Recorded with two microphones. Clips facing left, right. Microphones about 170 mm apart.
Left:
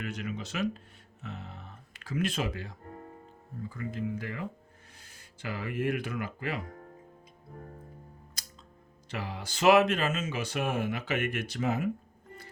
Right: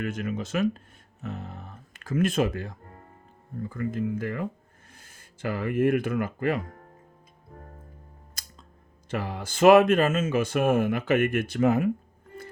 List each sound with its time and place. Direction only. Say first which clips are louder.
0.0 s speech: right 6 dB; 50° right (ahead or behind)
8.4 s music: right 1 dB; 50° right (ahead or behind)
9.0 s speech: right 6 dB; 50° right (ahead or behind)